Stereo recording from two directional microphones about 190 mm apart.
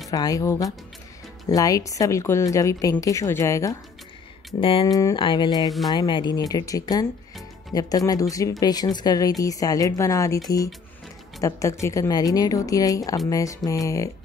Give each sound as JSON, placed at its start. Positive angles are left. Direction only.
{"t": 0.1, "sound": "speech", "side_deg": 20}
{"t": 4.6, "sound": "speech", "side_deg": 30}
{"t": 11.4, "sound": "speech", "side_deg": 15}